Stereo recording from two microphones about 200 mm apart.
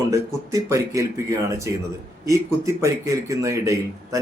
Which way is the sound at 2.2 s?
15° right (ahead or behind).